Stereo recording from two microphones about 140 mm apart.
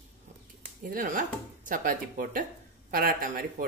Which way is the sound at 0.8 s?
70° right (ahead or behind).